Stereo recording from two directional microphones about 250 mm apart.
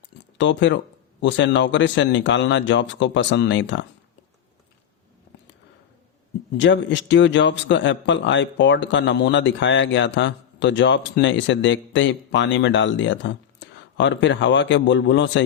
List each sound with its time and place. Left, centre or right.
0.3 s a man's voice: left
6.6 s a man's voice: left